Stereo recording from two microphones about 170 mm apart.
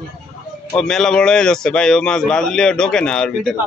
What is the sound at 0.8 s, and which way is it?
A man's voice, 5° left (ahead or behind).